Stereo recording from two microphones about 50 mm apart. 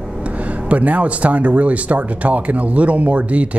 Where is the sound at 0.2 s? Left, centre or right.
Right.